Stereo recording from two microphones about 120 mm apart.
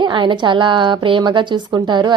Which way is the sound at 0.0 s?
40° right (ahead or behind).